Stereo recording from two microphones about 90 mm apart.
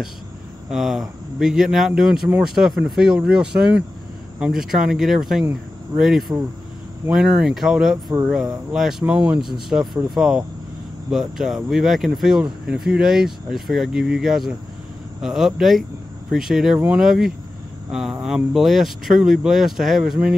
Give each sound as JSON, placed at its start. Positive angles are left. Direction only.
{"t": 0.7, "sound": "speech", "side_deg": -5}
{"t": 9.0, "sound": "speech", "side_deg": -15}